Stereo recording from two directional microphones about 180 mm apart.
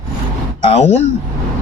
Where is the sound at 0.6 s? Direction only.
35° left (ahead or behind).